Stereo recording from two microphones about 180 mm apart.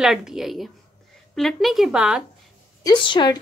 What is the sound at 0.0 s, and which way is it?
Speech, 5° right (ahead or behind).